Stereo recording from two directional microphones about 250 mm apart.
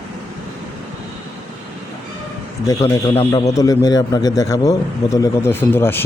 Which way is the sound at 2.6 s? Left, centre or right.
Centre.